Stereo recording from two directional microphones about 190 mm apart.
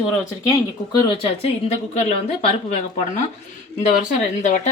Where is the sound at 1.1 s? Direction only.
30° left (ahead or behind).